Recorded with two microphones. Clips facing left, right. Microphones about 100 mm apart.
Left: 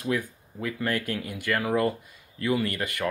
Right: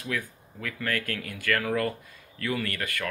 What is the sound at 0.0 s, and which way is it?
Speech, 25° left (ahead or behind).